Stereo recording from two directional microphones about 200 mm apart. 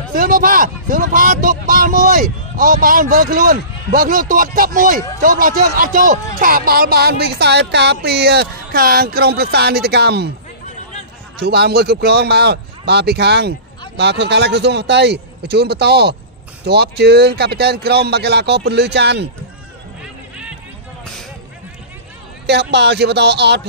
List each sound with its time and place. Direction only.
0.1 s speech: 45° right (ahead or behind)
11.3 s speech: 55° right (ahead or behind)
20.0 s music: 5° right (ahead or behind)
22.5 s speech: 55° right (ahead or behind)